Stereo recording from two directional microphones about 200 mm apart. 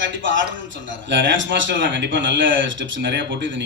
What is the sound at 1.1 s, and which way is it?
Speech, 65° right (ahead or behind).